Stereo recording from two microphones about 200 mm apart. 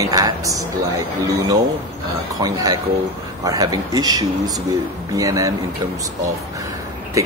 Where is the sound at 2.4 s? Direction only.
20° right (ahead or behind).